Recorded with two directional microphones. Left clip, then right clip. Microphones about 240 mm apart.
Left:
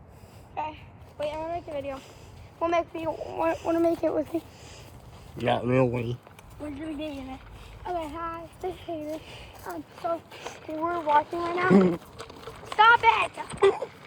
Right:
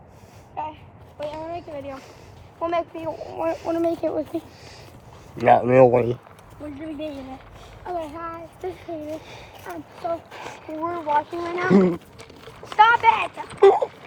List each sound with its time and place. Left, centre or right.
0.5 s a sound: centre
1.2 s speech: centre
8.1 s speech: left
12.8 s speech: centre